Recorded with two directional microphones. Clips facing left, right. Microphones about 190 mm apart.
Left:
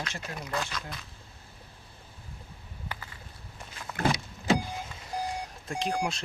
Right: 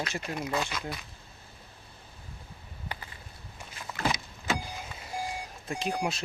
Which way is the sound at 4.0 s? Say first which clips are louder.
Left 3 dB; 55° left (ahead or behind).